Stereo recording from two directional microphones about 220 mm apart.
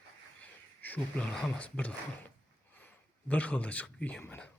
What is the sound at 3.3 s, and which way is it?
Speech, 5° left (ahead or behind).